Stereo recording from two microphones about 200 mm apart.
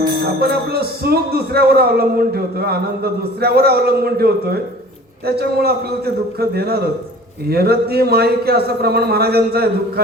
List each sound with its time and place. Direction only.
0.3 s a man's voice: 50° right (ahead or behind)